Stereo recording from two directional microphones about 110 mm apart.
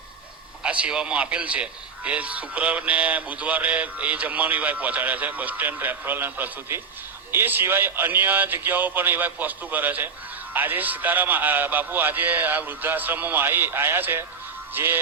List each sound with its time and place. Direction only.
0.6 s a man's voice: 10° right (ahead or behind)
14.7 s music: 20° right (ahead or behind)